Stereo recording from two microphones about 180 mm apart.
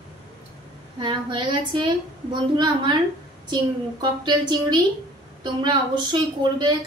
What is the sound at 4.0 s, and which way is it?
A woman's voice, 25° right (ahead or behind).